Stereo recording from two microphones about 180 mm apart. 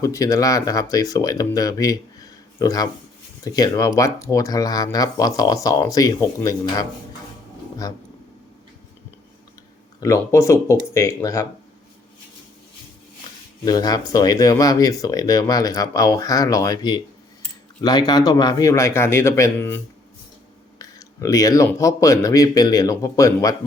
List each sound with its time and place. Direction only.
0.0 s speech: 20° left (ahead or behind)
10.0 s a man's voice: 15° left (ahead or behind)
13.7 s a man's voice: 20° left (ahead or behind)